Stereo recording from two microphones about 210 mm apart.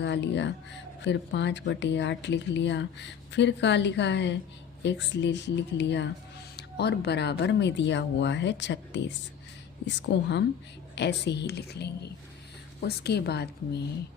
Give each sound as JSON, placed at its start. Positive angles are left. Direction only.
{"t": 0.0, "sound": "a woman's voice", "side_deg": 55}